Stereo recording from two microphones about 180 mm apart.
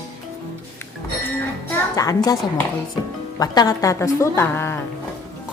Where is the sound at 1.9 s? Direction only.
20° left (ahead or behind).